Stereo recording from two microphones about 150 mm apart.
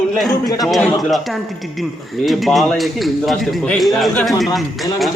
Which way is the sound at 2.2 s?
Centre (ahead or behind).